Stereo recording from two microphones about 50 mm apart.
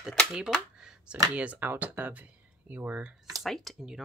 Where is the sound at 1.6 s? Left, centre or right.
Right.